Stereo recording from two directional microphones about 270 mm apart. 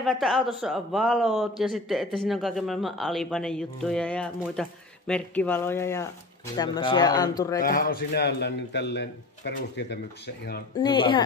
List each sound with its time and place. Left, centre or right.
0.0 s a man's voice: centre
7.6 s a man's voice: left
10.8 s speech: centre